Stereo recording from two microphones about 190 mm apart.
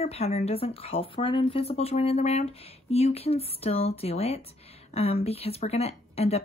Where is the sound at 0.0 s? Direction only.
30° left (ahead or behind).